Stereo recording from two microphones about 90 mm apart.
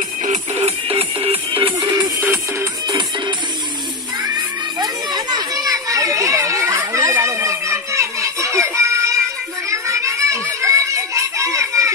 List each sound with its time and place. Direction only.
0.8 s music: 90° right
1.8 s music: 50° right (ahead or behind)
4.2 s children playing: 50° right (ahead or behind); by 11.9 s 35° right (ahead or behind)